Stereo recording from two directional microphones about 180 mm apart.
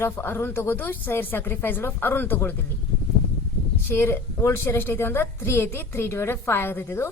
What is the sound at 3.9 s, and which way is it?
A woman's voice, 10° left (ahead or behind).